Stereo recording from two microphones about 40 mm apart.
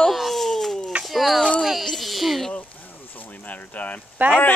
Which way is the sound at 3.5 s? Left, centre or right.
Left.